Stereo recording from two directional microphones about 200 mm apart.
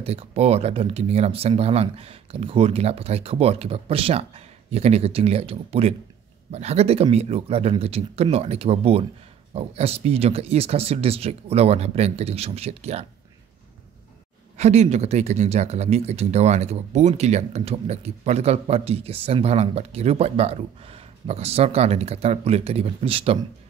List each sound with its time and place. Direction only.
0.0 s speech: 30° right (ahead or behind)
14.6 s speech: 35° right (ahead or behind)